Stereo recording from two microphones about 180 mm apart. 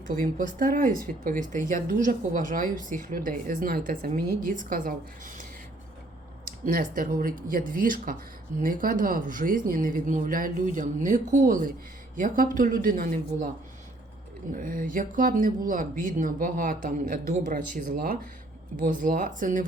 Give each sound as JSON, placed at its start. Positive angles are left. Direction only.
{"t": 0.2, "sound": "speech", "side_deg": -50}
{"t": 6.7, "sound": "speech", "side_deg": -50}
{"t": 14.5, "sound": "speech", "side_deg": -50}